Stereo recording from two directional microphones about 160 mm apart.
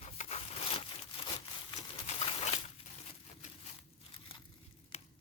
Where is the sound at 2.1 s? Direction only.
40° left (ahead or behind).